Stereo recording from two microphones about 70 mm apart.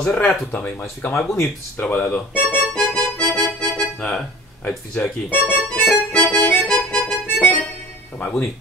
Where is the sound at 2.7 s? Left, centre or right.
Centre.